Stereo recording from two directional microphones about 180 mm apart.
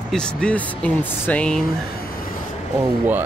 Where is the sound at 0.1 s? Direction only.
5° left (ahead or behind).